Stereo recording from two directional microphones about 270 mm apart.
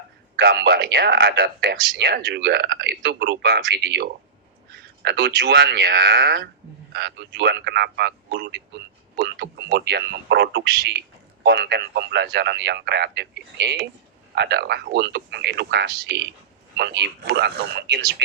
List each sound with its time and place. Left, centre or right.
0.3 s a man's voice: right